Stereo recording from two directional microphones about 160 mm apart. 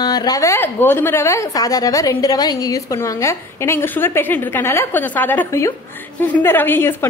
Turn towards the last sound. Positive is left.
turn(degrees=15)  # may be behind; listen again after turning